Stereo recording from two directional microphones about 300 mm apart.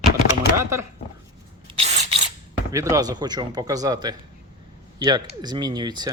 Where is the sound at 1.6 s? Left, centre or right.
Centre.